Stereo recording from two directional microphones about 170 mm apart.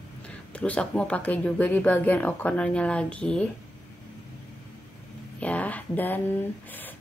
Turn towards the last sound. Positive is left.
turn(degrees=10)  # may be behind; listen again after turning